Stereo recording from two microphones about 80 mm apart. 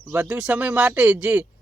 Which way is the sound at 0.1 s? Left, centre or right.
Centre.